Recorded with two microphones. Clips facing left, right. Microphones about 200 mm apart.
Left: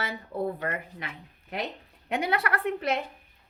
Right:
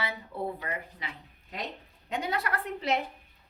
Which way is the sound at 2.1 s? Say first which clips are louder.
Left 4 dB; 70° left (ahead or behind).